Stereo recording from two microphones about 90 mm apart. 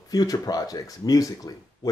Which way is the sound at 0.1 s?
45° left (ahead or behind).